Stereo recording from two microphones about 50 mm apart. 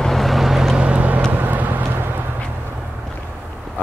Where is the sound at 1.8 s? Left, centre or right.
Right.